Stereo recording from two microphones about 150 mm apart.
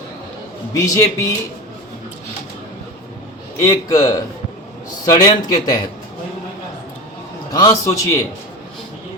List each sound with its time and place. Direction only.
0.8 s a man's voice: 20° left (ahead or behind)
3.6 s a man's voice: 20° left (ahead or behind)
7.5 s a man's voice: 20° left (ahead or behind)